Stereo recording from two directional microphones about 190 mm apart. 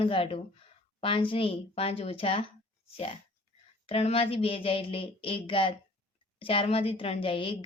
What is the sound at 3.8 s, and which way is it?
A woman's voice, 30° left (ahead or behind).